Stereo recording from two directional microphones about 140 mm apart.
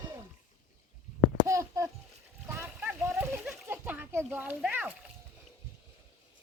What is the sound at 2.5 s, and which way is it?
Splash, 15° right (ahead or behind).